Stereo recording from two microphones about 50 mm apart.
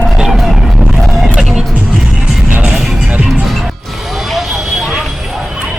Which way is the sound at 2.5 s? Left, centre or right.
Right.